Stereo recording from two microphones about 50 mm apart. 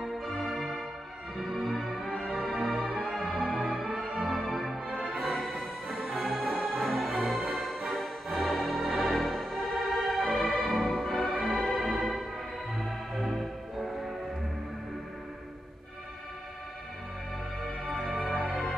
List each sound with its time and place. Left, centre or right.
0.0 s music: centre
4.8 s music: right
5.4 s music: centre
17.8 s music: centre